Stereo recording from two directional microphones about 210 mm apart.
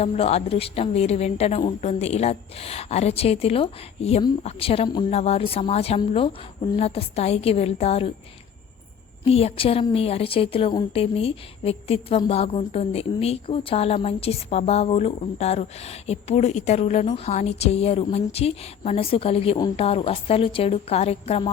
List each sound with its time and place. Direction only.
0.0 s a woman's voice: 30° left (ahead or behind)
9.2 s a woman's voice: 30° left (ahead or behind)